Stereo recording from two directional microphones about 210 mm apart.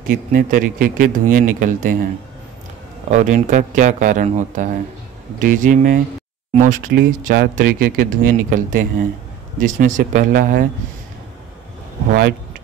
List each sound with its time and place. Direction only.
0.1 s speech: 40° right (ahead or behind)
3.1 s speech: 35° right (ahead or behind)
12.1 s speech: 45° right (ahead or behind)